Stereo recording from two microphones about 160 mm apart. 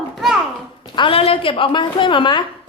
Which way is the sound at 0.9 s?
35° left (ahead or behind).